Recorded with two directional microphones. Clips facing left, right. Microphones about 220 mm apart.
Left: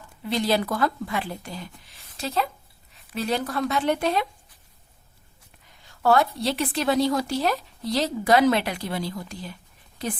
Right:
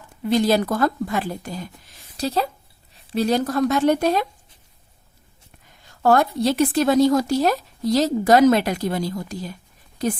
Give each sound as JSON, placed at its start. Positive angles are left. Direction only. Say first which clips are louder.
{"t": 0.3, "sound": "a woman's voice", "louder": "right 5 dB", "side_deg": -45}
{"t": 5.9, "sound": "a woman's voice", "louder": "right 3 dB", "side_deg": -45}